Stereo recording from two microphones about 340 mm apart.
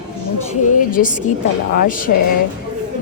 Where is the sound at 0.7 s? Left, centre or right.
Left.